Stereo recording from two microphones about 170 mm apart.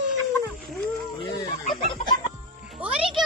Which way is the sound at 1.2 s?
25° left (ahead or behind).